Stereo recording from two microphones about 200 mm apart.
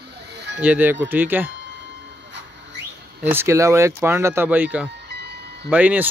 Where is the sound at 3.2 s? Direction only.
10° right (ahead or behind).